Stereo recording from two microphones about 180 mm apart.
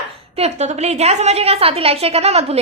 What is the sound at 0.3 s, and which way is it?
A woman's voice, 35° right (ahead or behind).